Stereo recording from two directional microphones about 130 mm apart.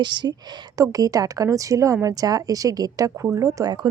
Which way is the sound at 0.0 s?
35° right (ahead or behind).